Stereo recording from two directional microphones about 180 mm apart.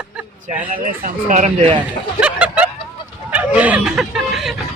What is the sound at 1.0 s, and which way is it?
Speech, 40° right (ahead or behind).